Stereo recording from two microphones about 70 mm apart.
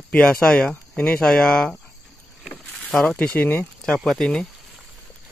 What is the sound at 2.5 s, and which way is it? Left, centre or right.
Vehicle, centre.